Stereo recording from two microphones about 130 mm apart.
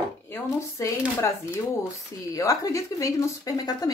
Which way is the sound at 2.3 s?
25° left (ahead or behind).